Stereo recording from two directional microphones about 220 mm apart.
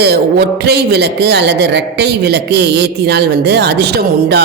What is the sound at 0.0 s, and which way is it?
Speech, 50° right (ahead or behind).